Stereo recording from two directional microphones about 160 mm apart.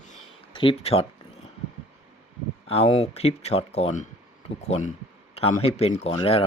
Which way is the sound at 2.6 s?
40° left (ahead or behind).